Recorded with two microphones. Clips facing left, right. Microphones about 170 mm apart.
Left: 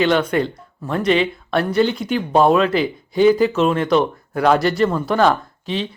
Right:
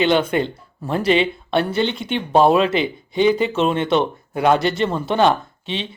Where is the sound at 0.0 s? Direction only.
25° right (ahead or behind).